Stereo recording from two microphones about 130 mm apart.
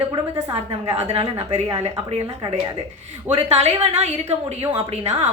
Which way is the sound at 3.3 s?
55° right (ahead or behind).